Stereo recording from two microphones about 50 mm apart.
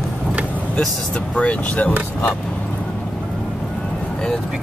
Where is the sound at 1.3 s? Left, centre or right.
Left.